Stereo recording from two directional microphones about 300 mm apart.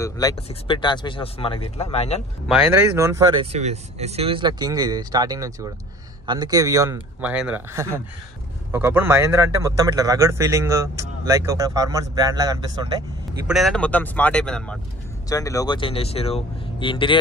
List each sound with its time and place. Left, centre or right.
0.0 s speech: centre
2.4 s speech: centre
13.5 s speech: centre